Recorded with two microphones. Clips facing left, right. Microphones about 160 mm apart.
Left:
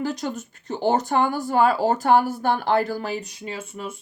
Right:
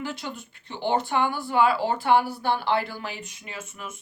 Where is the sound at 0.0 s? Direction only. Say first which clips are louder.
Left 7 dB; 40° left (ahead or behind).